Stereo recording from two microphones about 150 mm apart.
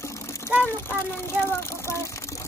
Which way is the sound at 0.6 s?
15° left (ahead or behind).